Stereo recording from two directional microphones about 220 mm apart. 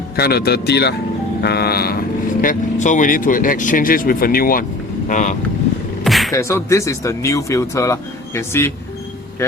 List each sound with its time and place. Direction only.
0.2 s speech: 45° left (ahead or behind)
6.1 s music: centre (ahead or behind)
6.3 s speech: 15° left (ahead or behind)